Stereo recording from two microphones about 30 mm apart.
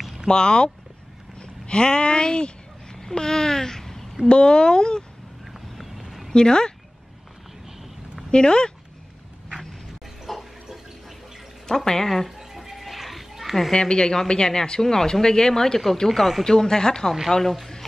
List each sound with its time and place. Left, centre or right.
0.3 s speech: left
1.4 s a sound: left; by 4.0 s centre
4.3 s speech: left
5.5 s a sound: centre
6.3 s speech: left
8.3 s speech: left
10.2 s a sound: centre
11.6 s speech: centre
12.3 s a sound: centre
12.7 s children playing: centre
13.7 s speech: left
16.1 s speech: centre
16.4 s speech: centre